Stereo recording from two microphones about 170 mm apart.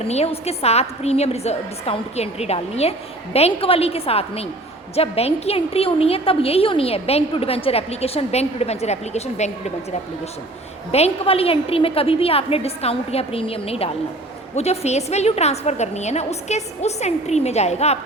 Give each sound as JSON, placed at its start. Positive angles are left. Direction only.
{"t": 0.0, "sound": "a woman's voice", "side_deg": 35}
{"t": 10.9, "sound": "a woman's voice", "side_deg": 35}